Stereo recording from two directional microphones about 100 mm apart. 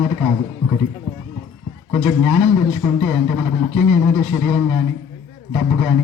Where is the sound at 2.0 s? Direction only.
25° right (ahead or behind).